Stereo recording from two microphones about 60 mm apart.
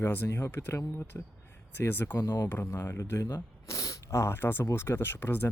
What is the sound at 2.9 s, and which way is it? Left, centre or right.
Speech, left.